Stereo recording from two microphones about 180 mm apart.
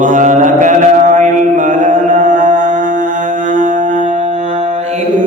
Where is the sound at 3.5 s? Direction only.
45° right (ahead or behind).